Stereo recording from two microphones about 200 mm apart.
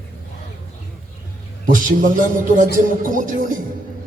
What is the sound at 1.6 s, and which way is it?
A man's voice, 45° right (ahead or behind).